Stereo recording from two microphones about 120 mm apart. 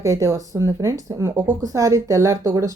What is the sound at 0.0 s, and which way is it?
Speech, 25° right (ahead or behind).